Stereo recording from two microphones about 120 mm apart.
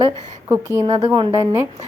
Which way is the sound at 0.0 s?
25° right (ahead or behind).